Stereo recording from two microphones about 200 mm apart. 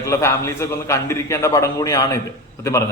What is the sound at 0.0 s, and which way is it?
Speech, 15° left (ahead or behind).